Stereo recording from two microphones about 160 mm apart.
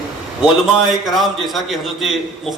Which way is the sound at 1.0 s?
Centre (ahead or behind).